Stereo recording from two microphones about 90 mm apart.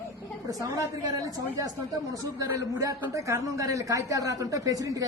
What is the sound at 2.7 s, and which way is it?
A man's voice, 35° right (ahead or behind).